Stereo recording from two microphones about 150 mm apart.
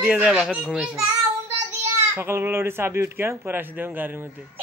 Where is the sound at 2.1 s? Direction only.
15° right (ahead or behind).